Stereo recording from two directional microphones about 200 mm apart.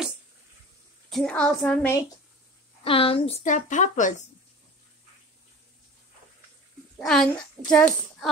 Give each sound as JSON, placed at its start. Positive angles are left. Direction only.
{"t": 1.1, "sound": "a child's voice", "side_deg": 5}
{"t": 2.8, "sound": "speech", "side_deg": 25}
{"t": 7.0, "sound": "a child's voice", "side_deg": 0}